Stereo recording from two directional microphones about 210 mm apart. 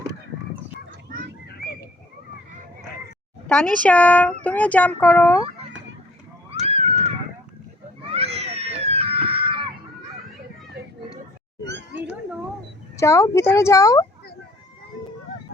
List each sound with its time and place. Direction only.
3.4 s speech: 5° left (ahead or behind)
6.6 s a sound: 30° right (ahead or behind)
8.0 s cat: 30° right (ahead or behind)
13.0 s speech: 15° left (ahead or behind)